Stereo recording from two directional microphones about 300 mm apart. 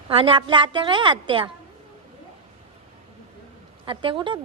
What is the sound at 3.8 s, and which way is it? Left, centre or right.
Speech, centre.